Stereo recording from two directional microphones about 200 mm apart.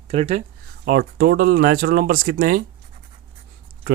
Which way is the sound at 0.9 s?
50° right (ahead or behind).